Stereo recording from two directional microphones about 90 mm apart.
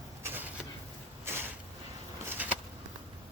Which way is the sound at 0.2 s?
20° right (ahead or behind).